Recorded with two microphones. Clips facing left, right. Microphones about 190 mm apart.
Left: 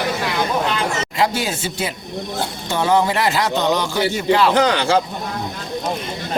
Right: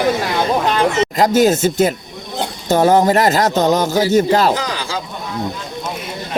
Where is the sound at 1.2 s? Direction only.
45° right (ahead or behind).